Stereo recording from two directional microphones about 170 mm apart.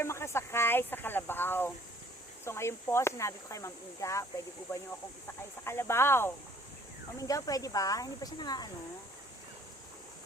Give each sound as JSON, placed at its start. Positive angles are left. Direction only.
{"t": 0.0, "sound": "speech", "side_deg": 15}